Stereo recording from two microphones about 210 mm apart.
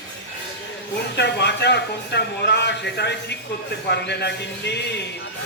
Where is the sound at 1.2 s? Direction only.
55° left (ahead or behind).